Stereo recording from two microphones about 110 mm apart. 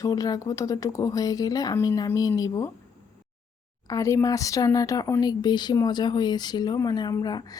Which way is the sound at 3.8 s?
30° left (ahead or behind).